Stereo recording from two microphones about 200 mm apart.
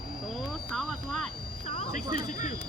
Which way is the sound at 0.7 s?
Centre (ahead or behind).